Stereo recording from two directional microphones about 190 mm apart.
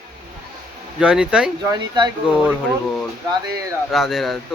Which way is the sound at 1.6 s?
25° right (ahead or behind).